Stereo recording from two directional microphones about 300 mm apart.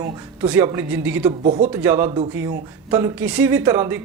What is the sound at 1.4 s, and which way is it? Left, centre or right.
Speech, right.